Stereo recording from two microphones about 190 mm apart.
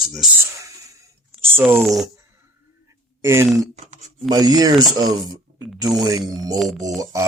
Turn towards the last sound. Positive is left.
turn(degrees=-15)  # may be behind; listen again after turning